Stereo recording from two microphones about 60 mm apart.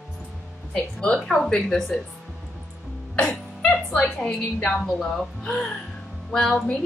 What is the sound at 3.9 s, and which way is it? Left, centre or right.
A woman's voice, centre.